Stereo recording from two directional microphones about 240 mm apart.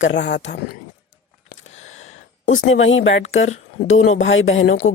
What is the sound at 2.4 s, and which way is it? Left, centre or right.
Speech, left.